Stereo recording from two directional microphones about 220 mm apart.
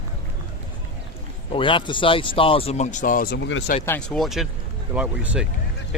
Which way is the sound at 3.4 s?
55° left (ahead or behind).